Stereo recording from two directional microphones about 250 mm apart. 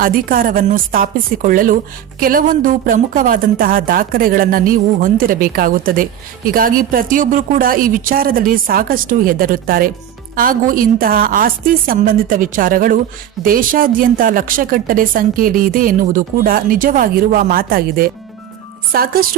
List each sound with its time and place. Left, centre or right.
0.0 s a woman's voice: right